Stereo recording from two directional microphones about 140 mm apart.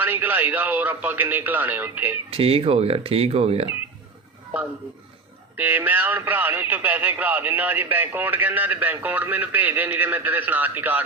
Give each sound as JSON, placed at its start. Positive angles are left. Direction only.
{"t": 0.0, "sound": "speech", "side_deg": -15}
{"t": 2.3, "sound": "speech", "side_deg": -40}
{"t": 5.5, "sound": "speech", "side_deg": -10}